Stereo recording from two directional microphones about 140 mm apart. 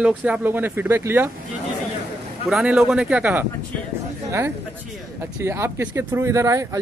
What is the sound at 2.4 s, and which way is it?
Speech, centre (ahead or behind).